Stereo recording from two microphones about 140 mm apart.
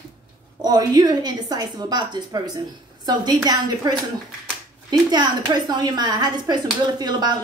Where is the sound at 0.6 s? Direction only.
30° right (ahead or behind).